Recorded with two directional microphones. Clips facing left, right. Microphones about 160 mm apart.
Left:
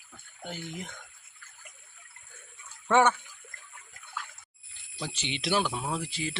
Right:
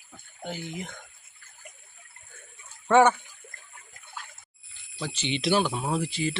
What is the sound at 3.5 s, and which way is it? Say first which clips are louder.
Water: right 2 dB; 35° right (ahead or behind).